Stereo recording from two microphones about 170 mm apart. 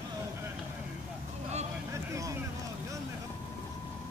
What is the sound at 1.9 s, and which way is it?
Vehicle, 15° right (ahead or behind).